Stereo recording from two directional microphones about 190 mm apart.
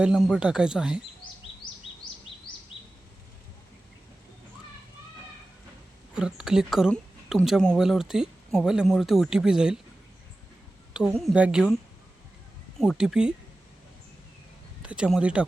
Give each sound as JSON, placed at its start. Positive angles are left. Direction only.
{"t": 0.0, "sound": "speech", "side_deg": -5}
{"t": 2.0, "sound": "bird vocalization", "side_deg": 25}
{"t": 6.1, "sound": "speech", "side_deg": -5}
{"t": 10.9, "sound": "a woman's voice", "side_deg": -5}
{"t": 12.8, "sound": "speech", "side_deg": 0}
{"t": 14.8, "sound": "speech", "side_deg": -5}